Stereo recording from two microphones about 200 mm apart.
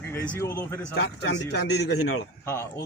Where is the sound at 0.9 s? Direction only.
55° left (ahead or behind).